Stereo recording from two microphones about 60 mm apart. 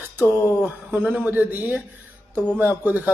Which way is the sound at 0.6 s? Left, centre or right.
Right.